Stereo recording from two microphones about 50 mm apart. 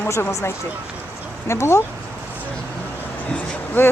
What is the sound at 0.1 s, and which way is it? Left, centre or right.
Speech, left.